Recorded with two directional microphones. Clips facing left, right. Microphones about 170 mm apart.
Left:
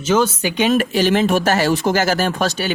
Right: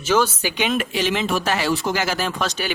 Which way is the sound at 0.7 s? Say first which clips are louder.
Left 8 dB; 50° left (ahead or behind).